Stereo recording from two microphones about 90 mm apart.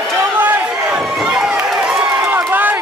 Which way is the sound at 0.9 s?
5° right (ahead or behind).